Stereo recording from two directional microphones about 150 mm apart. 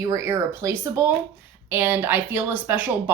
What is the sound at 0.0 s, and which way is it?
Speech, 20° right (ahead or behind).